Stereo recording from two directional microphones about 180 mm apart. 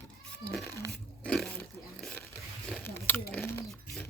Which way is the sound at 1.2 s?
5° left (ahead or behind).